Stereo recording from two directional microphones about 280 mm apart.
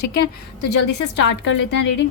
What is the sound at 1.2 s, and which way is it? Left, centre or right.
Speech, left.